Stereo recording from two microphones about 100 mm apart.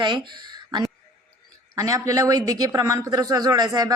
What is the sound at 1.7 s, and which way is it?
Speech, 35° right (ahead or behind).